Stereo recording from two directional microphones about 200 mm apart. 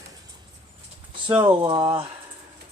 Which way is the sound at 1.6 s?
20° right (ahead or behind).